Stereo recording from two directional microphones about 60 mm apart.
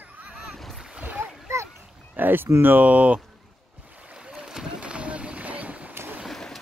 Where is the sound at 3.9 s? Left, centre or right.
Right.